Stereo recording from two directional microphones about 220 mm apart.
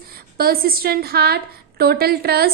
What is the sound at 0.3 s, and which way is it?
A woman's voice, 45° right (ahead or behind).